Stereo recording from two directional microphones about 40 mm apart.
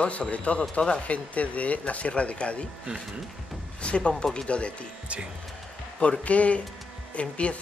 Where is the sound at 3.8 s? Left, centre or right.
Left.